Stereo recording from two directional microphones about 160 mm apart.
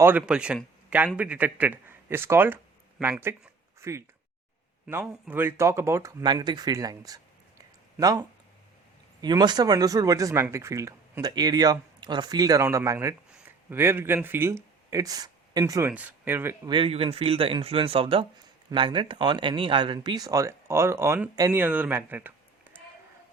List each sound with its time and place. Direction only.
0.0 s a man's voice: 10° right (ahead or behind)
4.9 s speech: 5° right (ahead or behind); by 7.2 s 25° right (ahead or behind)
7.6 s a sound: 20° right (ahead or behind)
9.2 s speech: 25° right (ahead or behind)
15.9 s a man's voice: 10° right (ahead or behind)
16.6 s speech: 30° right (ahead or behind); by 22.8 s 10° right (ahead or behind)